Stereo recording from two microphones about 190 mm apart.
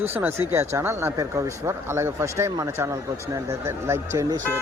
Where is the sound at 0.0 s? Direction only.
10° right (ahead or behind).